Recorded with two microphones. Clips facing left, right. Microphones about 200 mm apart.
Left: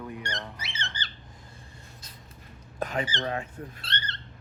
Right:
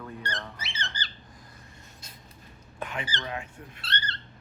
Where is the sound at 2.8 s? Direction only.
40° left (ahead or behind).